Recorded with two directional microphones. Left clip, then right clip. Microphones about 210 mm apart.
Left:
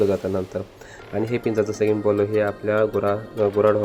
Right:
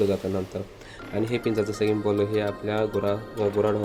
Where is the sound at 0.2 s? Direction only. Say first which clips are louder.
Left 4 dB; 5° left (ahead or behind).